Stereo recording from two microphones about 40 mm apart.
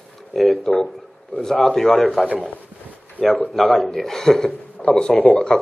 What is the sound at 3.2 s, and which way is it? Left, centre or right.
Speech, right.